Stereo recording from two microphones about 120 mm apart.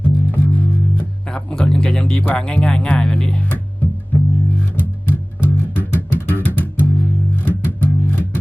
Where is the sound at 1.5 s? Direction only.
5° left (ahead or behind).